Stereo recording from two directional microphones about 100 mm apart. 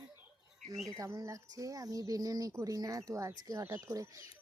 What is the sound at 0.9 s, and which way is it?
Speech, 35° right (ahead or behind).